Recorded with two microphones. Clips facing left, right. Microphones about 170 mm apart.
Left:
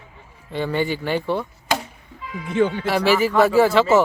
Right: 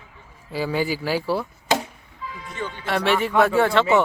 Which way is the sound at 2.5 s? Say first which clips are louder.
Left 14 dB; 55° left (ahead or behind).